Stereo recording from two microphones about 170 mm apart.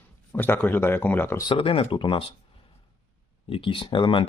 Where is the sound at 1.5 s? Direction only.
35° left (ahead or behind).